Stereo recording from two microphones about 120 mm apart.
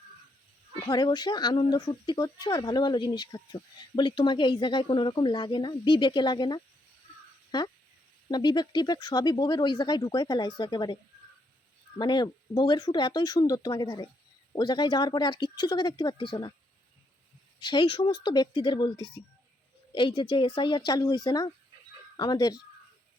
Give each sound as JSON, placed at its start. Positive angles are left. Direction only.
{"t": 0.9, "sound": "speech", "side_deg": 35}
{"t": 11.9, "sound": "speech", "side_deg": 35}
{"t": 17.6, "sound": "speech", "side_deg": 40}